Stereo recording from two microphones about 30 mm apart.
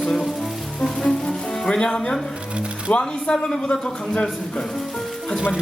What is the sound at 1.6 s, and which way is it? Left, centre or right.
Speech, left.